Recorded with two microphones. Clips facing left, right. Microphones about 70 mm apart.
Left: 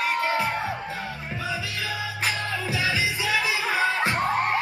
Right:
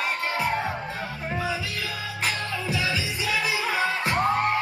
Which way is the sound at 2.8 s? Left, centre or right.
Left.